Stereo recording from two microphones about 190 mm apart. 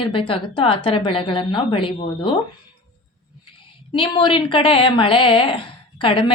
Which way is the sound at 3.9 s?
25° left (ahead or behind).